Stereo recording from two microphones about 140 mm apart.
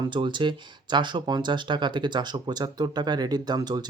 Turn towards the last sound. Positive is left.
turn(degrees=-30)  # may be behind; listen again after turning